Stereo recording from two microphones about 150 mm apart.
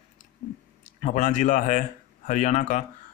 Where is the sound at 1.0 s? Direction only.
55° left (ahead or behind).